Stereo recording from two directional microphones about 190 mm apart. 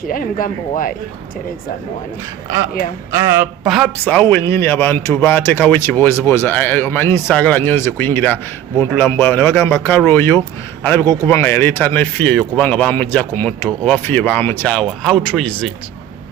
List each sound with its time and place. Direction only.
0.1 s speech: 45° left (ahead or behind)
3.1 s speech: 15° right (ahead or behind)
3.7 s speech: 5° left (ahead or behind)